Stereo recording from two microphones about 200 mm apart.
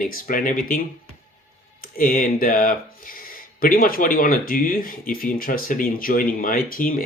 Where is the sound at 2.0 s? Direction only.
45° left (ahead or behind).